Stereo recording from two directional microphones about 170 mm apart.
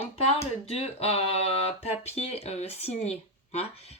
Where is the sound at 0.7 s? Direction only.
35° left (ahead or behind).